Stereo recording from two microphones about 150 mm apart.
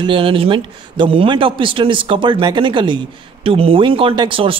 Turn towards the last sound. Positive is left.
turn(degrees=-35)  # may be behind; listen again after turning